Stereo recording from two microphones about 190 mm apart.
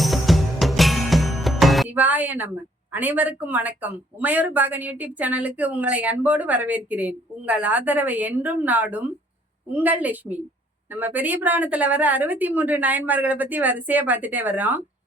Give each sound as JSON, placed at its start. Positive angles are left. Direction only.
{"t": 0.0, "sound": "music", "side_deg": 0}
{"t": 2.9, "sound": "speech", "side_deg": -10}